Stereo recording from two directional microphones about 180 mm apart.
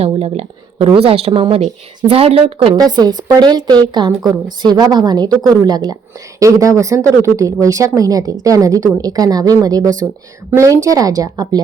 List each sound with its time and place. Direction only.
0.0 s a woman's voice: 35° right (ahead or behind)